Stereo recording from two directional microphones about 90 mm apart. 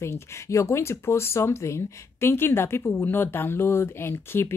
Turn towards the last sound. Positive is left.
turn(degrees=25)  # may be behind; listen again after turning